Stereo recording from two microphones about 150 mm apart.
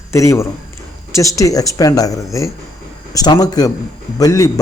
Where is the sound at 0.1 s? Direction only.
20° left (ahead or behind).